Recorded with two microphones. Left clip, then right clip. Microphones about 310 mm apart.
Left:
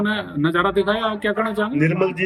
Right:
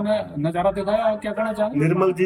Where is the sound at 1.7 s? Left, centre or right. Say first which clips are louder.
Even; centre.